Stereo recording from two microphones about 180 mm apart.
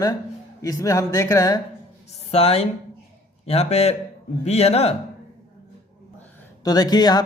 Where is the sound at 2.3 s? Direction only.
35° left (ahead or behind).